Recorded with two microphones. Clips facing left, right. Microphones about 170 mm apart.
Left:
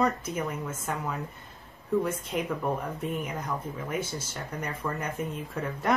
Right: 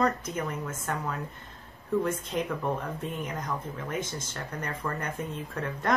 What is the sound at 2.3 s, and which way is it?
Speech, 10° left (ahead or behind).